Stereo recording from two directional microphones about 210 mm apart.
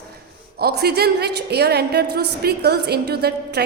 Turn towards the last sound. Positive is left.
turn(degrees=-50)  # may be behind; listen again after turning